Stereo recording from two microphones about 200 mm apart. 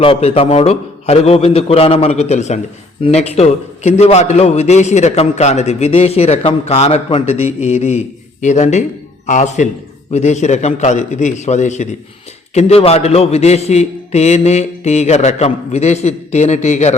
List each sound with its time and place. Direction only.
0.0 s a man's voice: 30° left (ahead or behind)